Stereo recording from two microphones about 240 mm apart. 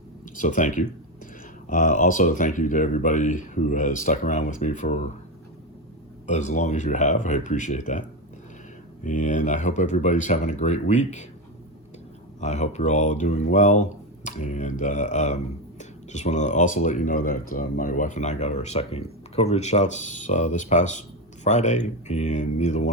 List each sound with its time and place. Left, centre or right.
0.3 s speech: left
6.2 s speech: left
9.0 s speech: left
12.4 s speech: left